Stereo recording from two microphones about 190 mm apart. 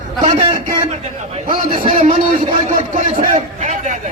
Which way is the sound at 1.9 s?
45° right (ahead or behind).